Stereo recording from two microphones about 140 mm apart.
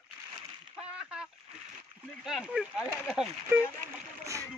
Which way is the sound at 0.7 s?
5° right (ahead or behind).